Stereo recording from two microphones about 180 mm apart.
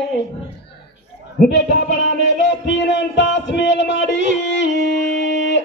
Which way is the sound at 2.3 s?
85° left.